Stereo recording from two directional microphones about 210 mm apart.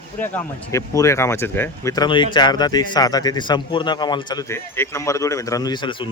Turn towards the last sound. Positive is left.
turn(degrees=20)  # may be behind; listen again after turning